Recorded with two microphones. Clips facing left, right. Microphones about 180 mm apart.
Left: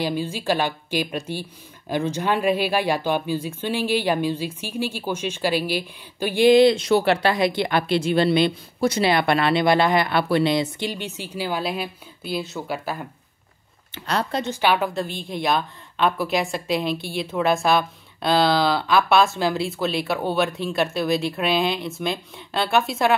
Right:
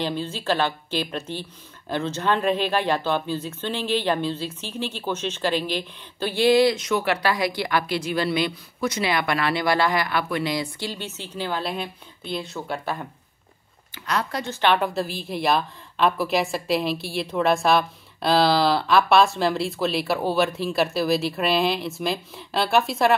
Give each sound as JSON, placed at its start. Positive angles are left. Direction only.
{"t": 0.0, "sound": "speech", "side_deg": 10}
{"t": 13.9, "sound": "speech", "side_deg": 30}
{"t": 14.4, "sound": "a woman's voice", "side_deg": 10}